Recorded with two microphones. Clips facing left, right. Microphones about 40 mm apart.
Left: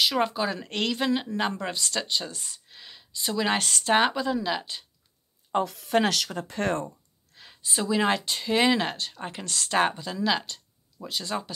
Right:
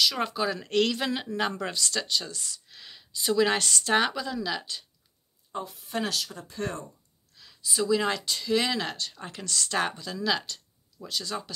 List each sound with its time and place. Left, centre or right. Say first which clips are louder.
0.0 s speech: left 2 dB; centre
1.7 s speech: even; left
2.3 s speech: right 1 dB; left
2.7 s speech: even; centre
5.5 s speech: left 9 dB; left
7.3 s a sound: even; left
7.7 s speech: left 1 dB; left